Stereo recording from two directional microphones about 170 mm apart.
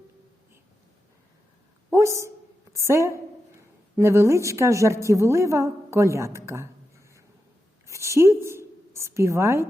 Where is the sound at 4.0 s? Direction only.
15° right (ahead or behind).